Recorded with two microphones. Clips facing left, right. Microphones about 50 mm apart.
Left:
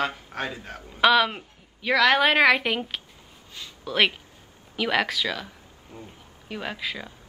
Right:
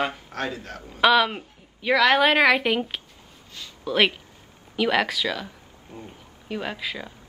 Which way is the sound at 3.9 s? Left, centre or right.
Centre.